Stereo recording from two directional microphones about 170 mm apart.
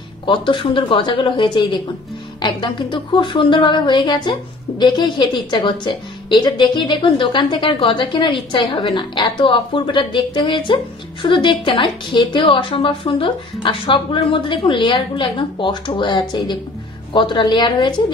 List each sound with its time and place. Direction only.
0.3 s speech: 30° left (ahead or behind)